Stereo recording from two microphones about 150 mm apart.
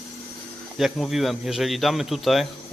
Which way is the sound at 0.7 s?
Centre (ahead or behind).